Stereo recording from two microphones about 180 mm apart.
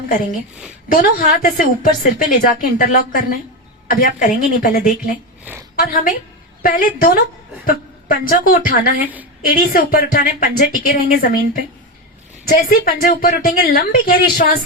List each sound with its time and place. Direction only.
0.9 s a woman's voice: 50° left (ahead or behind)